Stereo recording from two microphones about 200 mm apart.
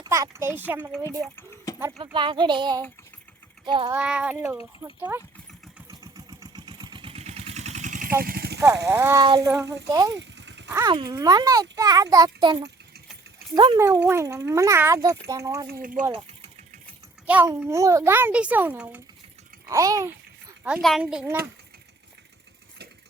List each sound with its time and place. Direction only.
0.0 s a child's voice: 15° right (ahead or behind)
1.7 s a sound: 15° left (ahead or behind)
2.1 s speech: 25° right (ahead or behind)
3.9 s speech: 5° right (ahead or behind)
5.9 s vehicle: 15° right (ahead or behind); by 8.1 s 40° right (ahead or behind)
8.2 s a sound: 50° right (ahead or behind)
8.6 s speech: 15° right (ahead or behind)
10.2 s a sound: 60° right (ahead or behind)
10.7 s speech: 20° right (ahead or behind)
13.7 s speech: 15° right (ahead or behind)
15.8 s speech: 40° right (ahead or behind)
17.2 s a child's voice: 5° right (ahead or behind)
20.7 s speech: centre (ahead or behind)